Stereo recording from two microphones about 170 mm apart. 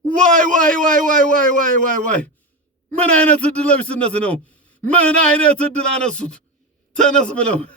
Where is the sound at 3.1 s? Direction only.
5° left (ahead or behind).